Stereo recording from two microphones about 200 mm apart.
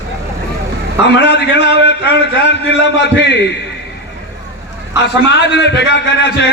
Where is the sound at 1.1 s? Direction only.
60° left (ahead or behind).